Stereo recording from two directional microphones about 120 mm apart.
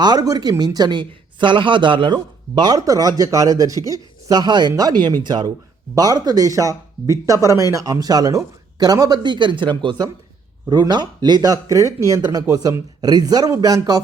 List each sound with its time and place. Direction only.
0.0 s speech: 35° right (ahead or behind)